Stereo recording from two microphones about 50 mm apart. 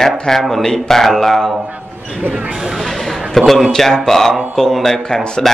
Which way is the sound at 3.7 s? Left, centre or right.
Centre.